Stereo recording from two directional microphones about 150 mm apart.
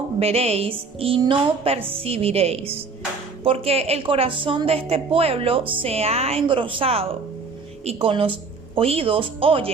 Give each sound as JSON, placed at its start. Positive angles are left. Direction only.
{"t": 0.2, "sound": "a woman's voice", "side_deg": -45}